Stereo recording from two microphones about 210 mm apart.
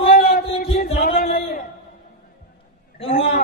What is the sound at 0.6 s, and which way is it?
Music, 45° left (ahead or behind).